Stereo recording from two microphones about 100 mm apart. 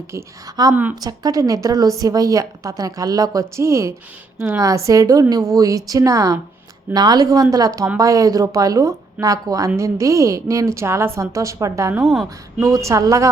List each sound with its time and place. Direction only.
0.1 s a woman's voice: 30° right (ahead or behind)
0.7 s a woman's voice: 15° right (ahead or behind)
1.0 s a woman's voice: 40° right (ahead or behind)
12.0 s a woman's voice: centre (ahead or behind)
12.6 s a woman's voice: 35° right (ahead or behind)